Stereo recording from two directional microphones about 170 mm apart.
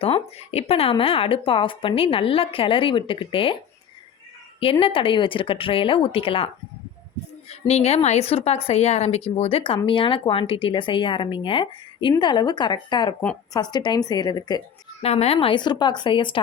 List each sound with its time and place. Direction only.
0.0 s speech: 35° left (ahead or behind)
4.6 s speech: 35° left (ahead or behind)
7.7 s a woman's voice: 40° left (ahead or behind)
15.0 s a woman's voice: 35° left (ahead or behind)